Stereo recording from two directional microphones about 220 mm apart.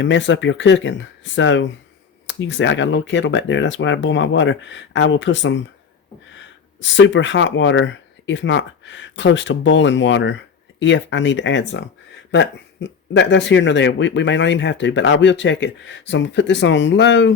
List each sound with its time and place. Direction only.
0.0 s speech: 55° left (ahead or behind)